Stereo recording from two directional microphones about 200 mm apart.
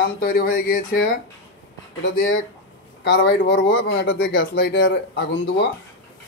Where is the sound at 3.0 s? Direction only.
55° left (ahead or behind).